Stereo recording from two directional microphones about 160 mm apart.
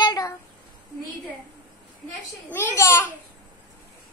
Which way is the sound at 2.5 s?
15° left (ahead or behind).